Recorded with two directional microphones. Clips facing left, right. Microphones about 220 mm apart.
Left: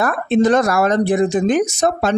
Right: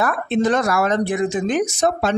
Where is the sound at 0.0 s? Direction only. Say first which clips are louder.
Left 4 dB; 40° left (ahead or behind).